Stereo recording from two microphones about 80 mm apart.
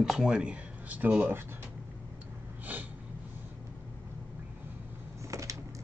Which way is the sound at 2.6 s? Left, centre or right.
Right.